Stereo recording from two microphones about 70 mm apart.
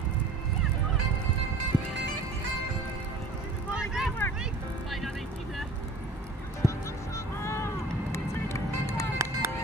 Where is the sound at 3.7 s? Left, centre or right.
Centre.